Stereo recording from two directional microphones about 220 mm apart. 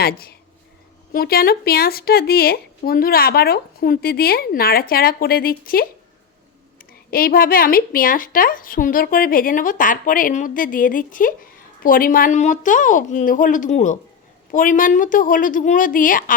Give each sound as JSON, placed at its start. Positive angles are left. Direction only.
{"t": 0.0, "sound": "speech", "side_deg": 45}
{"t": 7.1, "sound": "a woman's voice", "side_deg": 40}